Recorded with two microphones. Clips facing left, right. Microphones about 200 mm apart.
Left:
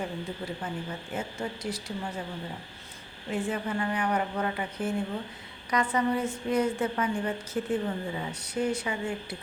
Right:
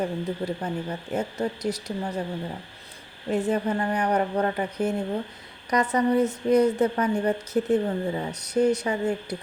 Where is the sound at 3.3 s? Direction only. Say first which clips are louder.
Right 6 dB; 40° right (ahead or behind).